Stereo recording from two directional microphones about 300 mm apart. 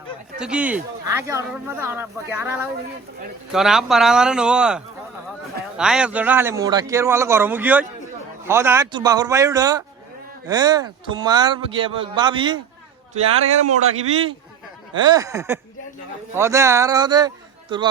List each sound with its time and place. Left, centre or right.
0.3 s speech: centre
13.6 s a man's voice: right